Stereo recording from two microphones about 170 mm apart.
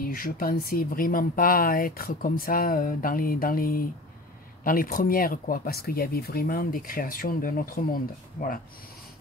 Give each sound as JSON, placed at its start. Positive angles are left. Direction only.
{"t": 0.0, "sound": "speech", "side_deg": 55}